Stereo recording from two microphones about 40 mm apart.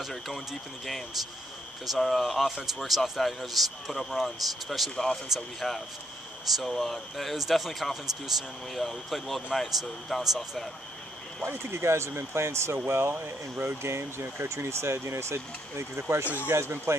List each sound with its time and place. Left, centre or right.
1.9 s speech: centre
11.4 s speech: right
13.6 s speech: right